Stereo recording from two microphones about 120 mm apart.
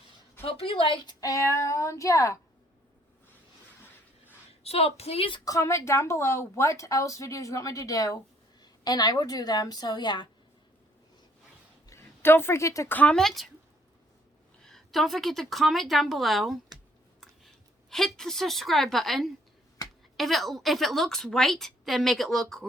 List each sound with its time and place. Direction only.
0.4 s speech: 50° left (ahead or behind); by 2.4 s 25° left (ahead or behind)
4.6 s a woman's voice: 55° left (ahead or behind)
5.5 s speech: 25° left (ahead or behind)
11.9 s a woman's voice: 20° left (ahead or behind)
13.0 s a woman's voice: 5° left (ahead or behind)
14.6 s a woman's voice: centre (ahead or behind)